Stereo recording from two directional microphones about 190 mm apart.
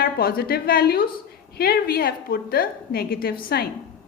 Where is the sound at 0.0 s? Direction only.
50° left (ahead or behind).